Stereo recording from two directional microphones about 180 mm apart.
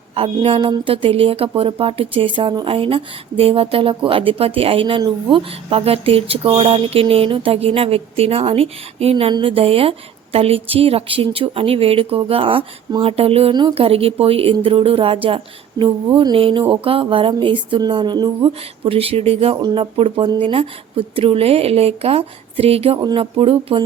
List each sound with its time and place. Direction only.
0.1 s speech: 30° right (ahead or behind)